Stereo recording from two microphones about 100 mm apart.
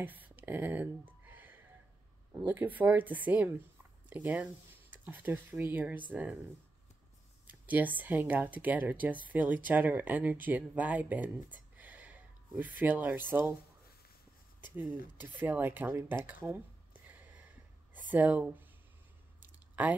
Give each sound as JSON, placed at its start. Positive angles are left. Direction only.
{"t": 0.0, "sound": "a sound", "side_deg": -20}
{"t": 2.3, "sound": "speech", "side_deg": -15}
{"t": 7.6, "sound": "speech", "side_deg": -15}
{"t": 15.2, "sound": "speech", "side_deg": -20}
{"t": 17.9, "sound": "speech", "side_deg": -15}
{"t": 19.8, "sound": "speech", "side_deg": -15}